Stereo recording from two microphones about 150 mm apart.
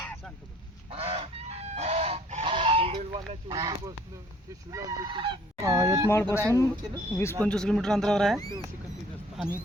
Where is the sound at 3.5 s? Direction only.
25° right (ahead or behind).